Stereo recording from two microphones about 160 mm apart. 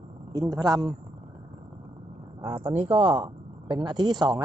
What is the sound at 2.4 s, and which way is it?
Speech, 30° right (ahead or behind).